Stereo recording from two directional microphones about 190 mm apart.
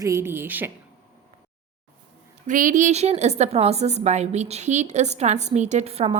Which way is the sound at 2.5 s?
40° right (ahead or behind).